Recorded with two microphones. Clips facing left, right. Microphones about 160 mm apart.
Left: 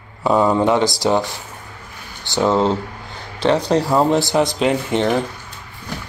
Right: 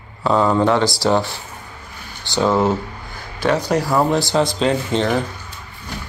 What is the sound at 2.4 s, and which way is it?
Speech, 20° left (ahead or behind).